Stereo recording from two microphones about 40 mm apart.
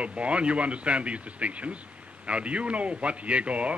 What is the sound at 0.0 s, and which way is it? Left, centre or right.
Speech, right.